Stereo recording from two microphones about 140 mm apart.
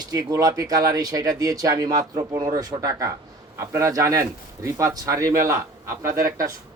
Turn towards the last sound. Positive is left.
turn(degrees=-25)  # may be behind; listen again after turning